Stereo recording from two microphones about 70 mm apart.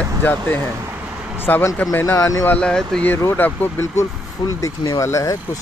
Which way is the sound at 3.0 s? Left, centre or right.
Left.